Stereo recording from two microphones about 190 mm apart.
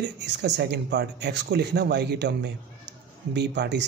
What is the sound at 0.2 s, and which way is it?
Speech, 65° right (ahead or behind).